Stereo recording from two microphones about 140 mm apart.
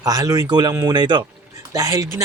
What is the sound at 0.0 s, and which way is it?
Speech, 25° right (ahead or behind).